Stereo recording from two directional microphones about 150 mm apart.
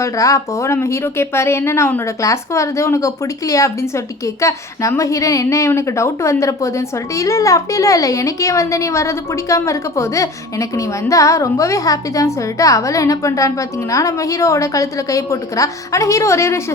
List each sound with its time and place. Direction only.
0.0 s speech: 20° left (ahead or behind)